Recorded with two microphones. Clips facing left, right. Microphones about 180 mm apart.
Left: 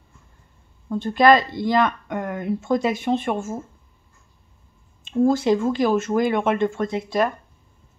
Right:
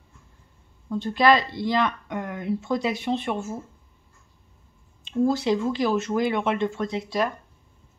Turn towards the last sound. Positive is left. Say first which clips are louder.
# left 4 dB
turn(degrees=50)  # may be behind; listen again after turning